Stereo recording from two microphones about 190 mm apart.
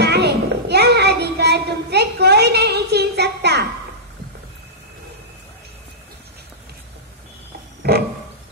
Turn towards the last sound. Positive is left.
turn(degrees=-55)  # may be behind; listen again after turning